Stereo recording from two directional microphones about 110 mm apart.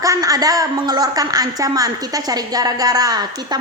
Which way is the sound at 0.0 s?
30° right (ahead or behind).